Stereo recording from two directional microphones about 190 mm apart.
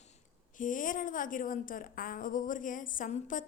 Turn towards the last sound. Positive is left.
turn(degrees=40)  # may be behind; listen again after turning